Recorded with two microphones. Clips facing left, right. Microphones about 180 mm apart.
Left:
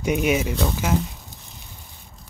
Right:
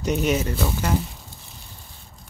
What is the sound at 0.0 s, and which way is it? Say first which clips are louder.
Speech: left 1 dB; 10° left (ahead or behind).